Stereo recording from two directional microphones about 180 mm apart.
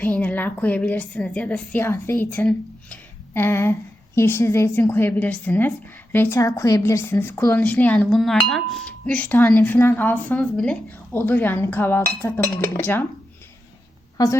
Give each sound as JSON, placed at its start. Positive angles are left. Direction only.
{"t": 0.0, "sound": "a woman's voice", "side_deg": 10}
{"t": 14.2, "sound": "a woman's voice", "side_deg": 20}